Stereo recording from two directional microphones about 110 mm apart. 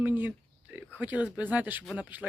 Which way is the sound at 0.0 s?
15° right (ahead or behind).